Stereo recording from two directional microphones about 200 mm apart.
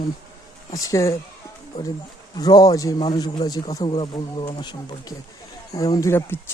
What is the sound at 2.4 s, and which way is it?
Speech, 20° left (ahead or behind).